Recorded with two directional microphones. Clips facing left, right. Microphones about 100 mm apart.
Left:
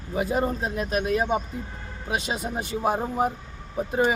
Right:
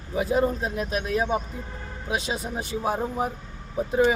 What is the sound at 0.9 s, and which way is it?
Speech, 50° left (ahead or behind).